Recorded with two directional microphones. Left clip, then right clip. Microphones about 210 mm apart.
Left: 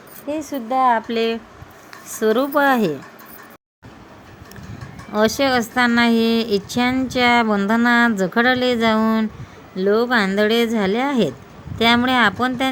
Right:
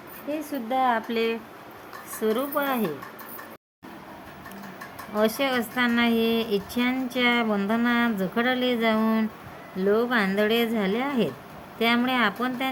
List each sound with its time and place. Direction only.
0.3 s speech: 15° left (ahead or behind)
2.1 s speech: 30° left (ahead or behind)
5.4 s speech: 30° left (ahead or behind)